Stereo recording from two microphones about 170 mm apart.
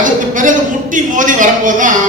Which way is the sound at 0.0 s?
50° right (ahead or behind).